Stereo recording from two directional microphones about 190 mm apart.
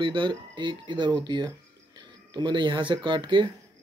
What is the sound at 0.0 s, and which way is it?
Speech, 25° right (ahead or behind).